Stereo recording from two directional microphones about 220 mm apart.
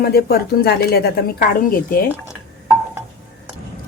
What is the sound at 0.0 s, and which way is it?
A woman's voice, 45° left (ahead or behind).